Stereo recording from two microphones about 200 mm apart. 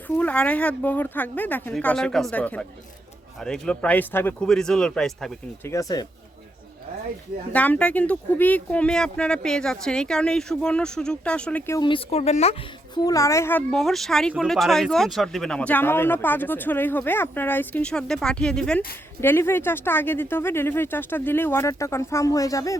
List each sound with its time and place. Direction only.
0.2 s speech: 5° left (ahead or behind)
5.6 s speech: 15° left (ahead or behind)
7.5 s speech: 5° left (ahead or behind)
11.9 s speech: 30° left (ahead or behind)
12.9 s speech: 15° left (ahead or behind)